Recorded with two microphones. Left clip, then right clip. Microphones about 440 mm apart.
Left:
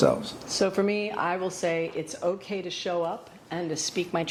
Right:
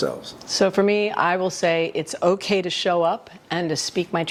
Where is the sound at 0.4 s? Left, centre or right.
Right.